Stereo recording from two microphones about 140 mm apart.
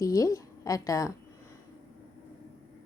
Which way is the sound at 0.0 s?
25° left (ahead or behind).